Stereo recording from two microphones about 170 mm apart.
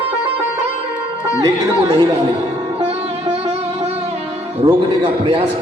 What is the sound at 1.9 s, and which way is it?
Speech, 20° right (ahead or behind).